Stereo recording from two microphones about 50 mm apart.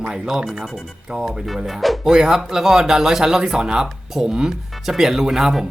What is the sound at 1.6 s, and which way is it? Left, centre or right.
Speech, centre.